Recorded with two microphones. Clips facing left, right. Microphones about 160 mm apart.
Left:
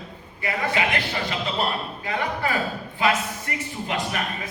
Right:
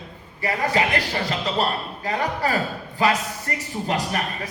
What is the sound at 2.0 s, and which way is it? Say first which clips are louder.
Speech: right 3 dB; 40° right (ahead or behind).